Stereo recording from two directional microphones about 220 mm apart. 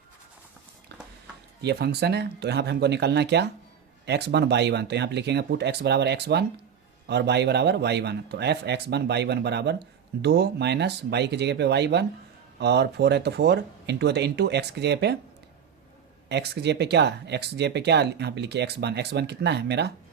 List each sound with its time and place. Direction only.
1.6 s speech: 50° right (ahead or behind)
16.3 s speech: 50° right (ahead or behind)